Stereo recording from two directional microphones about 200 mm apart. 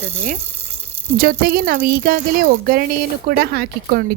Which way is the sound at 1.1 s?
45° right (ahead or behind).